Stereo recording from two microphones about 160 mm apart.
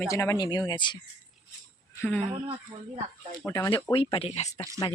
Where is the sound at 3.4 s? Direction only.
15° left (ahead or behind).